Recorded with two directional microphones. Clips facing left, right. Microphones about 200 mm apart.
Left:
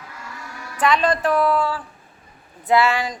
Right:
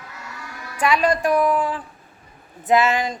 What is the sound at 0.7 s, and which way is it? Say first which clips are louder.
A woman's voice: even; 10° right (ahead or behind).